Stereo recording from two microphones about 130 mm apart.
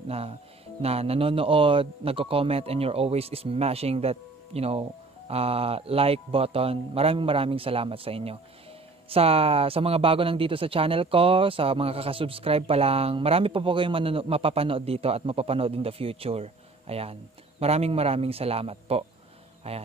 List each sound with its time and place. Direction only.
0.1 s speech: 50° right (ahead or behind)